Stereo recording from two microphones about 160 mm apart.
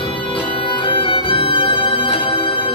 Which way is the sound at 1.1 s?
35° left (ahead or behind).